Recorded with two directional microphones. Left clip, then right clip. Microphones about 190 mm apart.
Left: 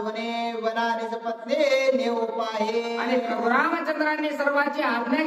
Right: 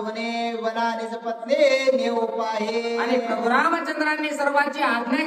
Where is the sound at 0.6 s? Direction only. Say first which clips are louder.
Left 1 dB; 10° left (ahead or behind).